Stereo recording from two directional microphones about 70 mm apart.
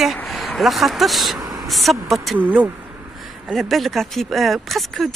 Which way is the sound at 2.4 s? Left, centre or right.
Right.